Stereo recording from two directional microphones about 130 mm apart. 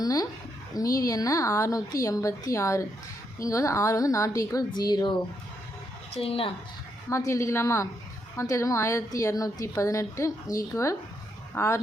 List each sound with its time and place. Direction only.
0.0 s a sound: 30° left (ahead or behind)
0.8 s a woman's voice: 25° left (ahead or behind)
6.1 s speech: 45° left (ahead or behind)
7.1 s a woman's voice: 20° left (ahead or behind)